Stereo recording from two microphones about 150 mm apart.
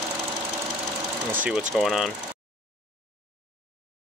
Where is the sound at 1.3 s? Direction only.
10° right (ahead or behind).